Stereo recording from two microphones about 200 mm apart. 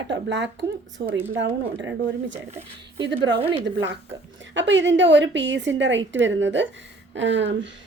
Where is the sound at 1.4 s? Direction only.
70° right (ahead or behind).